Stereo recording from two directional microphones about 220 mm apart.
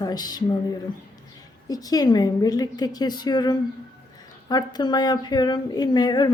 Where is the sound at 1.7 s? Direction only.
15° left (ahead or behind).